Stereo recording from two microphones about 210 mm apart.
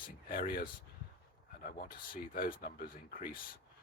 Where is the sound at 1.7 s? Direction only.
50° left (ahead or behind).